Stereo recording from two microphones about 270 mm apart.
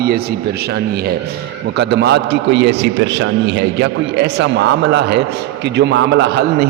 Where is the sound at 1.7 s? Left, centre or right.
Right.